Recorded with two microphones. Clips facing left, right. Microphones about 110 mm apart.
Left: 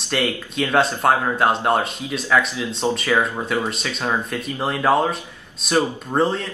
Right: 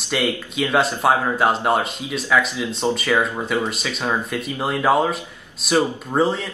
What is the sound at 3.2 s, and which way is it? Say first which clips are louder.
Speech: even; centre (ahead or behind).